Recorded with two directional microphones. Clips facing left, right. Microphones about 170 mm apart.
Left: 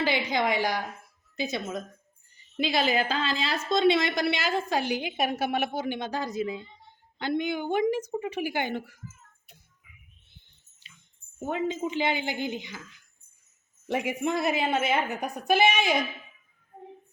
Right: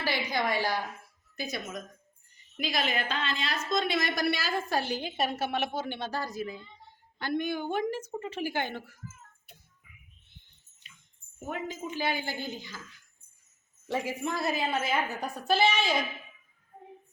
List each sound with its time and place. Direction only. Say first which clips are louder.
0.0 s a woman's voice: left 4 dB; 20° left (ahead or behind)
10.8 s a sound: left 1 dB; 30° left (ahead or behind)
11.3 s a woman's voice: left 7 dB; 25° left (ahead or behind)
13.8 s a woman's voice: left 4 dB; 20° left (ahead or behind)